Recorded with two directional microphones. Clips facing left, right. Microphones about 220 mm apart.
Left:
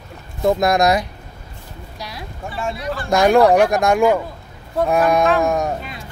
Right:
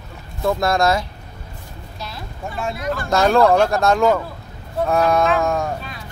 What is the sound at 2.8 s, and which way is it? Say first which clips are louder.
Speech: right 1 dB; 45° right (ahead or behind).